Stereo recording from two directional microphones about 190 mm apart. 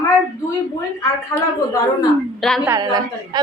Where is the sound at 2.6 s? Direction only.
15° right (ahead or behind).